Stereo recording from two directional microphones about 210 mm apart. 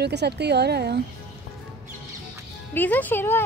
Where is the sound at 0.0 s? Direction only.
55° right (ahead or behind).